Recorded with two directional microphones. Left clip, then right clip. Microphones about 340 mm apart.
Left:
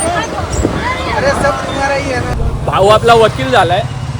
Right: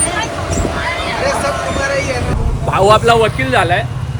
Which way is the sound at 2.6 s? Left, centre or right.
Centre.